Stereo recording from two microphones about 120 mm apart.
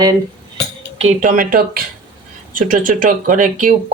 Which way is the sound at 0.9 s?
75° right (ahead or behind).